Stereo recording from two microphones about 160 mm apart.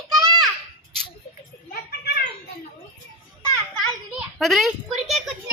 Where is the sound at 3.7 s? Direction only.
Centre (ahead or behind).